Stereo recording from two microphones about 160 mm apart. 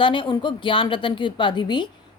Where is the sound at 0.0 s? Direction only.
30° left (ahead or behind).